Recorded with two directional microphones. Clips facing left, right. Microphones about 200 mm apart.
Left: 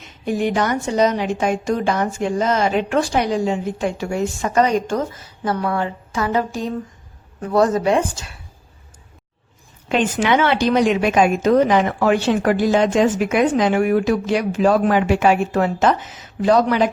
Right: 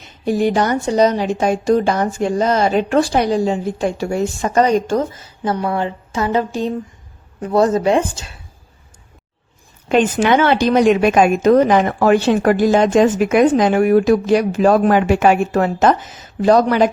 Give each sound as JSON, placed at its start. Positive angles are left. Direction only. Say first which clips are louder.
{"t": 0.3, "sound": "a woman's voice", "louder": "right 3 dB", "side_deg": -35}
{"t": 5.4, "sound": "a woman's voice", "louder": "right 2 dB", "side_deg": -25}
{"t": 9.9, "sound": "a woman's voice", "louder": "right 4 dB", "side_deg": -45}